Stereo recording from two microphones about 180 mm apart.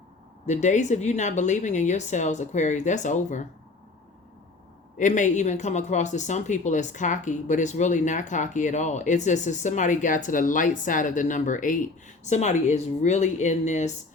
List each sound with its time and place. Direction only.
0.4 s a woman's voice: 40° left (ahead or behind)
4.9 s speech: 45° left (ahead or behind)